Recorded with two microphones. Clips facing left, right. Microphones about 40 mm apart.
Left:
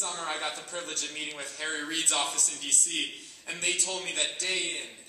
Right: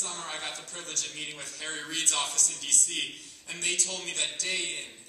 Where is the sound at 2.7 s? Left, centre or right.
Centre.